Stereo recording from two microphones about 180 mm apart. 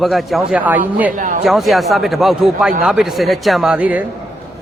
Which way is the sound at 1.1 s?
45° right (ahead or behind).